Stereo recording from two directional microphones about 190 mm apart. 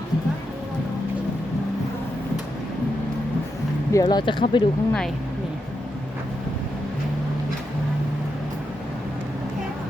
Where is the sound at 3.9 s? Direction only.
20° left (ahead or behind).